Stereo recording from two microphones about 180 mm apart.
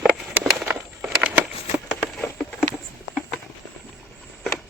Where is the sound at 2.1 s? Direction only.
5° left (ahead or behind).